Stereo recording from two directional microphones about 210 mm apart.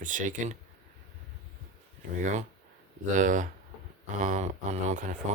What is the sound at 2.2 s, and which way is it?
Speech, 35° right (ahead or behind).